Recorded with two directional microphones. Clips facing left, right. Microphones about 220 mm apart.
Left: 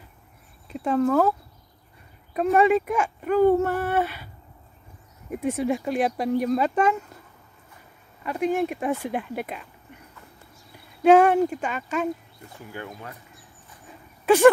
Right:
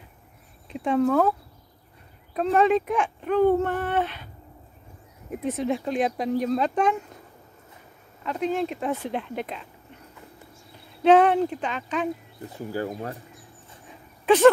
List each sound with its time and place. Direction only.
0.7 s speech: centre (ahead or behind)
2.3 s speech: 10° left (ahead or behind)
5.3 s speech: 10° left (ahead or behind)
8.3 s speech: 10° left (ahead or behind)
11.0 s speech: 10° left (ahead or behind)
12.4 s speech: 35° right (ahead or behind)
13.8 s a sound: 10° left (ahead or behind)